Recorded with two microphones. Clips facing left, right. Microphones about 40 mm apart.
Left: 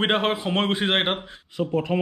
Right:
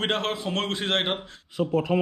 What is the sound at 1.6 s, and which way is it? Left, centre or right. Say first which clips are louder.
Speech: even; centre.